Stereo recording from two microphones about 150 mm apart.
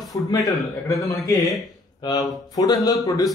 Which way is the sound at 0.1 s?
30° left (ahead or behind).